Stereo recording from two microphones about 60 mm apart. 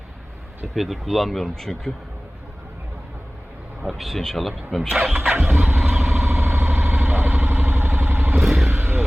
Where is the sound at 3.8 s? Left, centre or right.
Centre.